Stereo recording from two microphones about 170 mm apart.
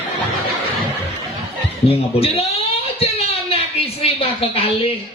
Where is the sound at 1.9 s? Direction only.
35° left (ahead or behind).